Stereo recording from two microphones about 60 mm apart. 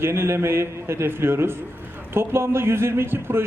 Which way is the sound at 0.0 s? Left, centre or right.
Right.